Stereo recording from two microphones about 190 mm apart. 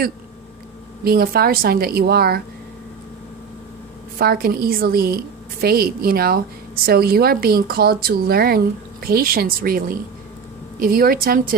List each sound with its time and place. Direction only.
1.0 s a woman's voice: 55° right (ahead or behind)
4.2 s a woman's voice: 50° right (ahead or behind)